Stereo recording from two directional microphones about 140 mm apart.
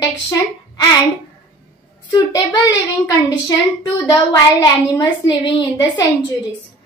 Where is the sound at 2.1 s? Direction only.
30° left (ahead or behind).